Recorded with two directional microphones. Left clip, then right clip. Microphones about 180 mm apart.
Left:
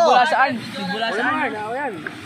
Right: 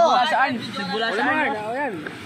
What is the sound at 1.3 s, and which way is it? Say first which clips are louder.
Speech: even; 40° right (ahead or behind).